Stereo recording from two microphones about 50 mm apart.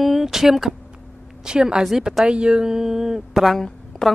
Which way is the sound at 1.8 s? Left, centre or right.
Centre.